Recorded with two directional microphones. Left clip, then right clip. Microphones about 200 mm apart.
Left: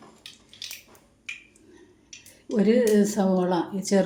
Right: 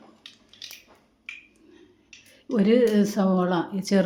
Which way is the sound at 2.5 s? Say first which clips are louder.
Even; 20° right (ahead or behind).